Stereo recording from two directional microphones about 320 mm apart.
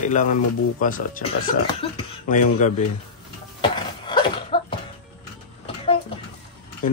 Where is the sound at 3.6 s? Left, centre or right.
Centre.